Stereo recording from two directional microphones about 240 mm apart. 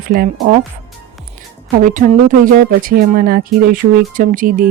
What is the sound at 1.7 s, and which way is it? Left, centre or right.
A woman's voice, right.